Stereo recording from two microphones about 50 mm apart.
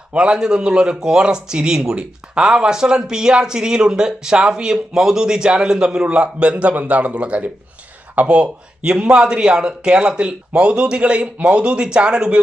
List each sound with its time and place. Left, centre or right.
0.1 s speech: centre